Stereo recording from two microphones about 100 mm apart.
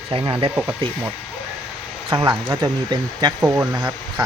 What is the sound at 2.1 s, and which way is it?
Speech, 50° right (ahead or behind).